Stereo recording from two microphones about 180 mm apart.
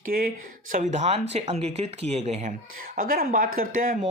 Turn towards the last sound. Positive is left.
turn(degrees=-50)  # may be behind; listen again after turning